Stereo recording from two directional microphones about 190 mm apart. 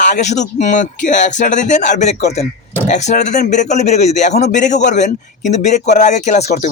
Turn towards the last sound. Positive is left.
turn(degrees=35)  # may be behind; listen again after turning